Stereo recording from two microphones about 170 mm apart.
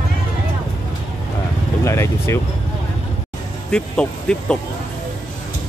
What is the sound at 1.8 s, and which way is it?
Vehicle, 15° left (ahead or behind).